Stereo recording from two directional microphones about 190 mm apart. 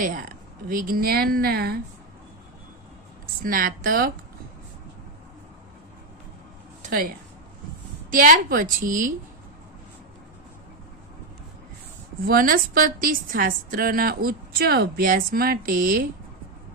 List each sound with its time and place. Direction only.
0.0 s a woman's voice: 45° right (ahead or behind)
3.4 s a woman's voice: 45° right (ahead or behind)
6.8 s a sound: 50° right (ahead or behind)
8.1 s a woman's voice: 45° right (ahead or behind)
12.3 s a woman's voice: 50° right (ahead or behind)